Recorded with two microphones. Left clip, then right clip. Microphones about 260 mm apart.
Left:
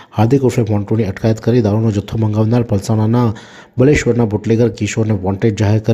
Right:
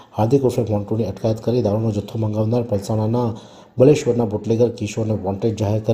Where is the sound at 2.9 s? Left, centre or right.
Left.